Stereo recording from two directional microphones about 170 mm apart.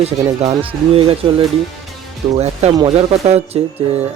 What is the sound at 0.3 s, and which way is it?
Speech, 35° right (ahead or behind).